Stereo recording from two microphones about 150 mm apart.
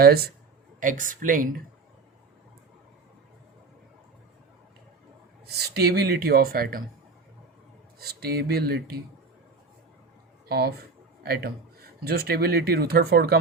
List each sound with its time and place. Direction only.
0.0 s speech: 90° right
0.8 s speech: 60° right (ahead or behind)
5.5 s speech: 90° right
7.9 s speech: 90° right
10.5 s speech: 90° right